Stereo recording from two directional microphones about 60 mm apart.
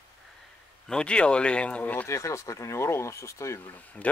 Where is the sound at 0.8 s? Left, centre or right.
Centre.